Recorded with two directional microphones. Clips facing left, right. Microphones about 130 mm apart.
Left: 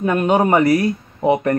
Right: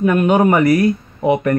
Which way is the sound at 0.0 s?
30° left (ahead or behind).